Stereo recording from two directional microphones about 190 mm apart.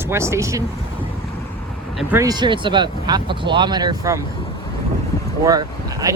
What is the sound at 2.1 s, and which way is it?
Speech, 20° right (ahead or behind).